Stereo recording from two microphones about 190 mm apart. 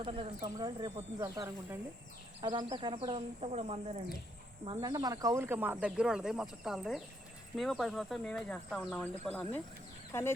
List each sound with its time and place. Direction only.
0.0 s speech: 30° right (ahead or behind); by 10.3 s 15° left (ahead or behind)